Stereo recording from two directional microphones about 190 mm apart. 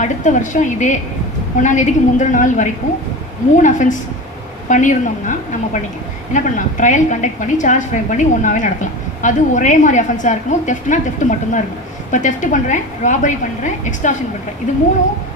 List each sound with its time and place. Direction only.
0.0 s a woman's voice: 40° left (ahead or behind)